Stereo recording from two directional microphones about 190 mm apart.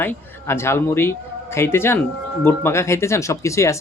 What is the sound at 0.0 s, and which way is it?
A man's voice, 10° left (ahead or behind).